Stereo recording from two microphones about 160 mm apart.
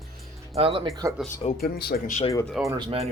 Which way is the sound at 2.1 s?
45° left (ahead or behind).